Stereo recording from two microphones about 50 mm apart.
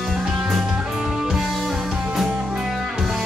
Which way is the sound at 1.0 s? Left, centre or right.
Centre.